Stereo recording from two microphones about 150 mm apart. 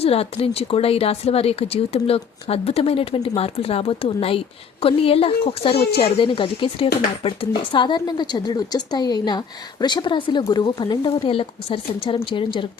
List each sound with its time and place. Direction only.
0.0 s speech: 40° left (ahead or behind)
5.7 s speech: 90° left
6.0 s speech: 35° left (ahead or behind)